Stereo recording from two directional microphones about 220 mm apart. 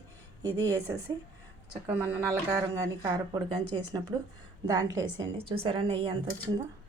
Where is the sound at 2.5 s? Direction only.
15° right (ahead or behind).